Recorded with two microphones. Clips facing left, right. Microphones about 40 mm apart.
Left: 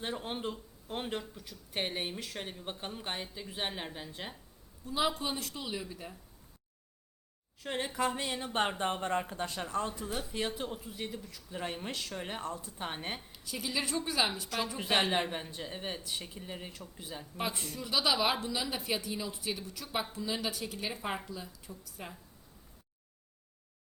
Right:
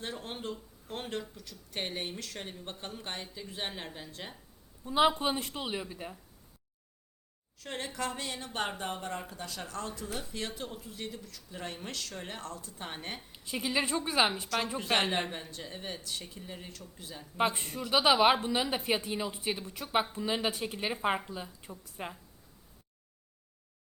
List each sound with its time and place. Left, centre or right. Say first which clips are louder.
0.0 s speech: left 2 dB; centre
4.9 s a woman's voice: right 6 dB; right
5.9 s speech: right 3 dB; centre
7.6 s speech: left 3 dB; centre
8.8 s speech: left 5 dB; left; by 13.1 s centre
13.3 s a woman's voice: right 6 dB; right
15.3 s speech: left 2 dB; centre
17.3 s a woman's voice: right 7 dB; right